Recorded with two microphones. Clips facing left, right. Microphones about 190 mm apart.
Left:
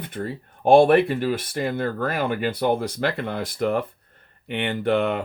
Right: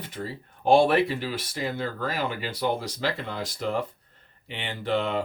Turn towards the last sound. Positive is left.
turn(degrees=55)  # may be behind; listen again after turning